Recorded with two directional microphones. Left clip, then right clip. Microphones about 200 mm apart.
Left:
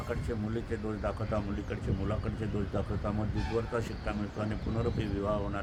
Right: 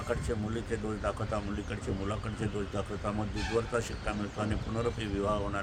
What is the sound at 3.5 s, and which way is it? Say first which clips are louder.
Speech: right 2 dB; 5° right (ahead or behind).